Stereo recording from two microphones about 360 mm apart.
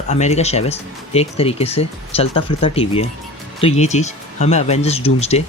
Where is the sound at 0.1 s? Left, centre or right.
Centre.